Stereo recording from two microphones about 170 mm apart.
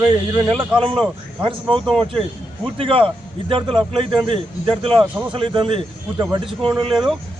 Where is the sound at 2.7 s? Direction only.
30° right (ahead or behind).